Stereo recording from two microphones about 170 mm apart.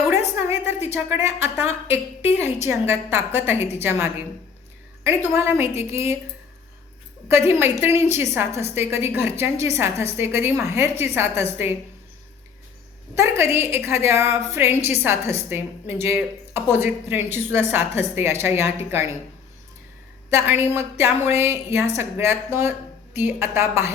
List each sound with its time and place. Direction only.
0.3 s a sound: 15° right (ahead or behind)
0.9 s a woman's voice: 15° right (ahead or behind)
7.3 s a woman's voice: 15° right (ahead or behind)
13.1 s a woman's voice: 15° right (ahead or behind)
20.3 s a woman's voice: 15° right (ahead or behind)